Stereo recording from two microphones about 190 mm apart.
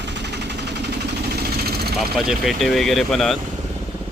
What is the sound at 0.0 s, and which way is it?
Vehicle, 65° right (ahead or behind).